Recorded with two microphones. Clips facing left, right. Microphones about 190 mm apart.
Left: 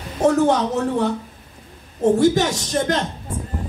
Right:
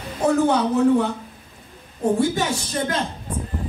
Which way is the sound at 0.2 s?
40° left (ahead or behind).